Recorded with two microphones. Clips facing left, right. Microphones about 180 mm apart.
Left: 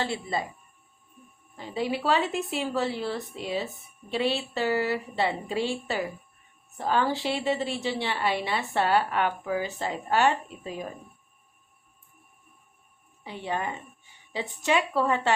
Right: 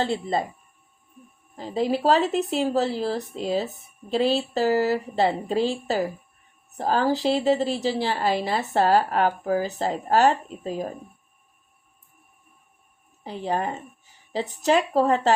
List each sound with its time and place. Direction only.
0.0 s speech: 45° right (ahead or behind)
1.5 s a woman's voice: 35° right (ahead or behind)
13.2 s a woman's voice: 40° right (ahead or behind)